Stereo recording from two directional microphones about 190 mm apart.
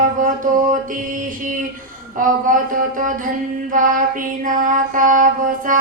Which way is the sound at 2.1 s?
45° right (ahead or behind).